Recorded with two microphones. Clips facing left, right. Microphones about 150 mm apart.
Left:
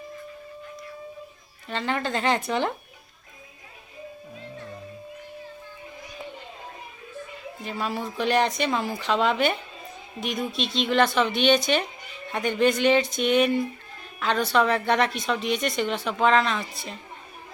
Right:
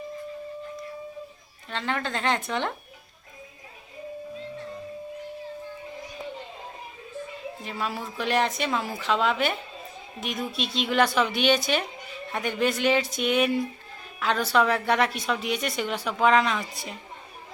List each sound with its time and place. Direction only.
1.6 s a woman's voice: centre (ahead or behind)
7.6 s a woman's voice: centre (ahead or behind)